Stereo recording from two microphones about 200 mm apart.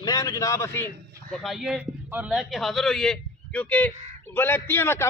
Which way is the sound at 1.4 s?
Centre (ahead or behind).